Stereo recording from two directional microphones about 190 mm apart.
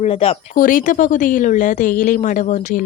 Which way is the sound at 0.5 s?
45° left (ahead or behind).